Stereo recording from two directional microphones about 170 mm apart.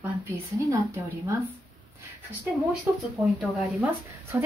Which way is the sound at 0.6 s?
20° right (ahead or behind).